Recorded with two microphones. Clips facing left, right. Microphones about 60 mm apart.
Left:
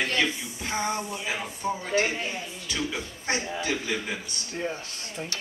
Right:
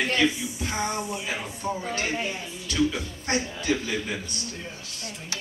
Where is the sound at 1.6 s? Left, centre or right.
Centre.